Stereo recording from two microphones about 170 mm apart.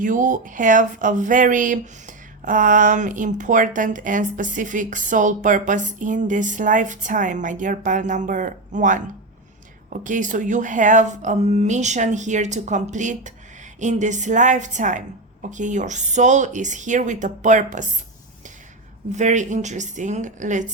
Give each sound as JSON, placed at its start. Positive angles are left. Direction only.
{"t": 0.0, "sound": "speech", "side_deg": -50}
{"t": 19.1, "sound": "speech", "side_deg": -45}